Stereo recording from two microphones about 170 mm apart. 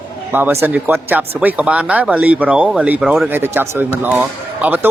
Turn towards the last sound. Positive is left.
turn(degrees=-10)  # may be behind; listen again after turning